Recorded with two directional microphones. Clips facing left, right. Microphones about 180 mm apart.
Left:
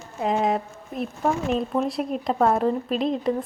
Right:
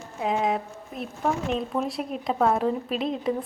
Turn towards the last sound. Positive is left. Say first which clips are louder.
# left 3 dB
turn(degrees=0)  # may be behind; listen again after turning